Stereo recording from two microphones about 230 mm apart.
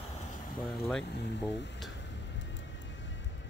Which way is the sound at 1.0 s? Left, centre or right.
Left.